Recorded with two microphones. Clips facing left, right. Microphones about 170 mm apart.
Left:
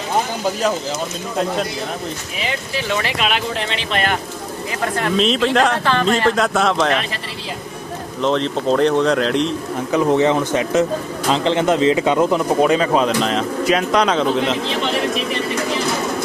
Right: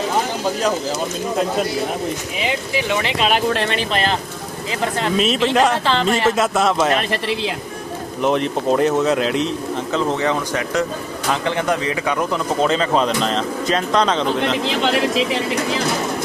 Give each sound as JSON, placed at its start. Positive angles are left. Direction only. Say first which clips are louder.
{"t": 2.4, "sound": "speech", "louder": "right 2 dB", "side_deg": -15}
{"t": 3.5, "sound": "speech", "louder": "right 4 dB", "side_deg": -65}
{"t": 5.1, "sound": "speech", "louder": "left 1 dB", "side_deg": -5}
{"t": 5.8, "sound": "speech", "louder": "left 1 dB", "side_deg": -20}
{"t": 6.2, "sound": "speech", "louder": "even", "side_deg": -5}
{"t": 7.1, "sound": "speech", "louder": "right 8 dB", "side_deg": -70}
{"t": 8.2, "sound": "speech", "louder": "even", "side_deg": -10}
{"t": 9.9, "sound": "speech", "louder": "left 5 dB", "side_deg": 15}
{"t": 15.2, "sound": "speech", "louder": "right 2 dB", "side_deg": -90}